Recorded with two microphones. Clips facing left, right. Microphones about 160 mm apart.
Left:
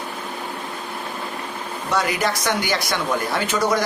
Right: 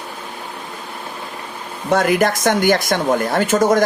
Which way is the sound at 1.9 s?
50° right (ahead or behind).